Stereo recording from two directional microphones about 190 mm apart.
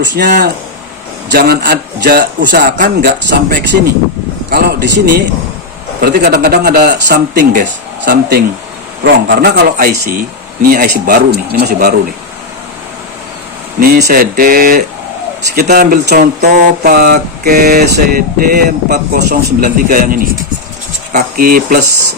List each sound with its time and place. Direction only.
0.3 s a man's voice: 50° right (ahead or behind)
4.4 s a man's voice: 55° right (ahead or behind)
13.7 s speech: 50° right (ahead or behind)